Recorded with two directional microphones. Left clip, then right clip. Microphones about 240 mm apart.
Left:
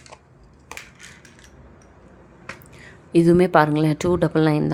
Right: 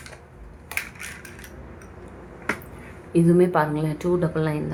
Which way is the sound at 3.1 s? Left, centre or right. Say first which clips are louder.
Left 4 dB; left.